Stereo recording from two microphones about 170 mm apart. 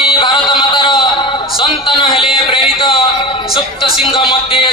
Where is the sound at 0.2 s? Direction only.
25° left (ahead or behind).